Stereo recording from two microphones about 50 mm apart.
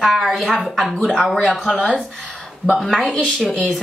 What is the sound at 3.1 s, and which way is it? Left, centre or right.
Speech, centre.